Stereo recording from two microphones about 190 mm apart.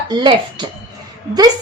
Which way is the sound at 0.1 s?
25° right (ahead or behind).